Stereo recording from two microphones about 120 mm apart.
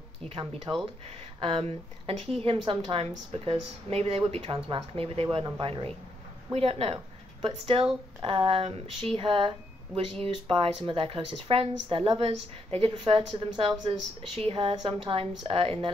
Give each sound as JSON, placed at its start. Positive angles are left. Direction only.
{"t": 0.7, "sound": "speech", "side_deg": -20}
{"t": 1.4, "sound": "a woman's voice", "side_deg": -55}
{"t": 10.5, "sound": "a woman's voice", "side_deg": -45}